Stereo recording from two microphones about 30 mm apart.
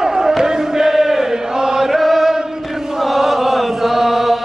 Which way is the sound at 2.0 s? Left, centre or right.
Centre.